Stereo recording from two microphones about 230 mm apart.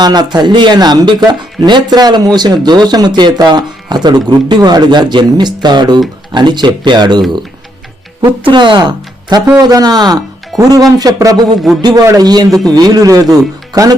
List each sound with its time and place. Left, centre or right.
0.0 s speech: centre
8.2 s speech: centre